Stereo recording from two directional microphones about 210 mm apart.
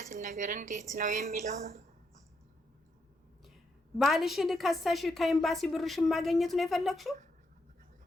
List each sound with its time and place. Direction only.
0.0 s speech: 40° right (ahead or behind)
3.9 s a woman's voice: centre (ahead or behind)